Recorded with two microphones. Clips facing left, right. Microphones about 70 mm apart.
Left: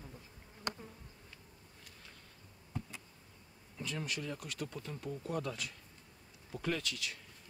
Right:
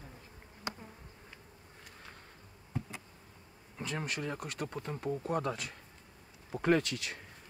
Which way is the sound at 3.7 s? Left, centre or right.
Right.